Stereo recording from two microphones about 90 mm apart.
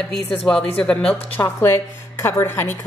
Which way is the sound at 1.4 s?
30° left (ahead or behind).